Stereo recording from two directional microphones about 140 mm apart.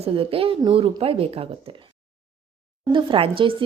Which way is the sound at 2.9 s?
40° right (ahead or behind).